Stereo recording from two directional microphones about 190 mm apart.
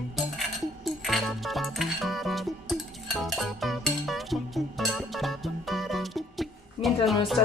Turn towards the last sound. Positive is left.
turn(degrees=0)  # may be behind; listen again after turning